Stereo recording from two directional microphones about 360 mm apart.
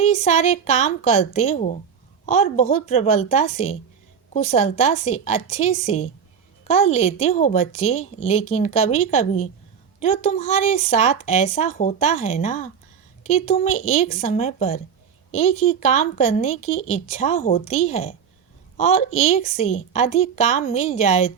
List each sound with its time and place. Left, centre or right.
0.0 s a woman's voice: centre